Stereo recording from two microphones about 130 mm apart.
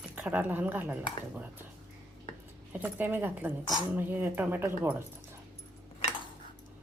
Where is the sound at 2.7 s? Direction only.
15° right (ahead or behind).